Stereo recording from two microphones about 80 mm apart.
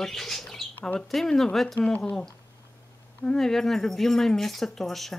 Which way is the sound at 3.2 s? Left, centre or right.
Centre.